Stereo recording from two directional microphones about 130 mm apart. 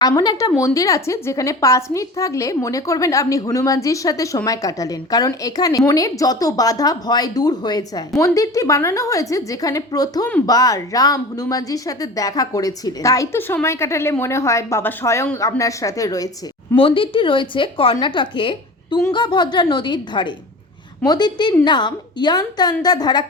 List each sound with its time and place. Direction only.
0.0 s a woman's voice: 30° left (ahead or behind)
16.8 s a woman's voice: 45° left (ahead or behind)